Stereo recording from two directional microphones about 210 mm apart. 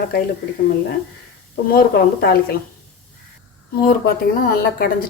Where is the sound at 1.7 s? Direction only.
45° left (ahead or behind).